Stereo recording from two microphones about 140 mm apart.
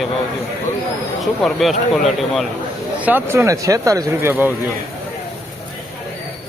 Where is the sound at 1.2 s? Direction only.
Centre (ahead or behind).